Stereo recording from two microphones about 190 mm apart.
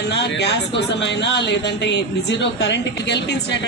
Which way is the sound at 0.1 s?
65° left (ahead or behind).